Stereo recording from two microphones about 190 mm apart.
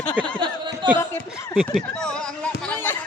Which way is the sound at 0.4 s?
25° right (ahead or behind).